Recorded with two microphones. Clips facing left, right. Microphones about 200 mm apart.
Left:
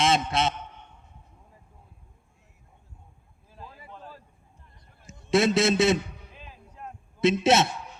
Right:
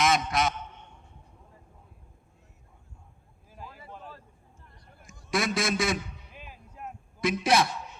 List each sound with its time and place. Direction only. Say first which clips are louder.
0.0 s a man's voice: left 1 dB; 25° left (ahead or behind)
4.9 s a man's voice: left 7 dB; 25° left (ahead or behind)
6.4 s a sound: right 1 dB; 10° right (ahead or behind)
7.2 s a man's voice: left 4 dB; 25° left (ahead or behind)